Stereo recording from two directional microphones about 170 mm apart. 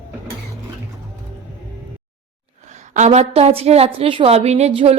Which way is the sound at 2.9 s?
45° right (ahead or behind).